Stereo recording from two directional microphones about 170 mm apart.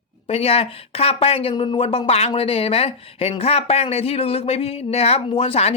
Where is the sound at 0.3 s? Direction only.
35° left (ahead or behind).